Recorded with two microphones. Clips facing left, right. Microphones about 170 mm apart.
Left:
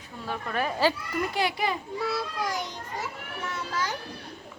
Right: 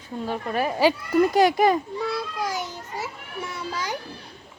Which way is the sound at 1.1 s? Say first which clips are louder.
Right 10 dB; 40° right (ahead or behind).